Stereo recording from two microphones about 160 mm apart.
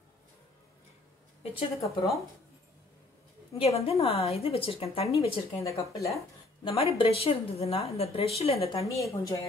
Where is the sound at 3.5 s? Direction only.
40° left (ahead or behind).